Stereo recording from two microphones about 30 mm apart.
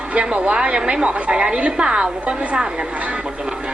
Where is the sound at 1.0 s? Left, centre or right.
Right.